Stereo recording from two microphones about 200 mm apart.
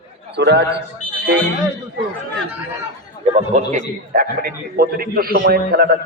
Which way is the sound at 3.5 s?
35° right (ahead or behind).